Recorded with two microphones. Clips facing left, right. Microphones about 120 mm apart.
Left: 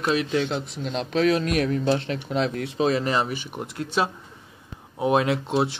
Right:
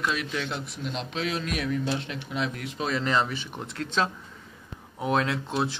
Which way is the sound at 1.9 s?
35° left (ahead or behind).